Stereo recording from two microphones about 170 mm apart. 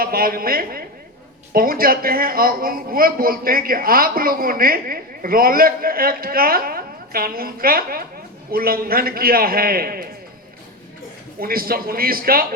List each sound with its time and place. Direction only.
0.0 s a woman's voice: 60° right (ahead or behind)
11.3 s a woman's voice: 60° right (ahead or behind)